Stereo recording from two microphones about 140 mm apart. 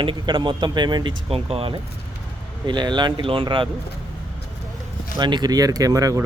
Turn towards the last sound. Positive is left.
turn(degrees=-25)  # may be behind; listen again after turning